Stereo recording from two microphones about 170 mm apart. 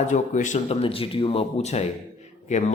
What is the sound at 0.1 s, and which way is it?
Speech, 45° left (ahead or behind).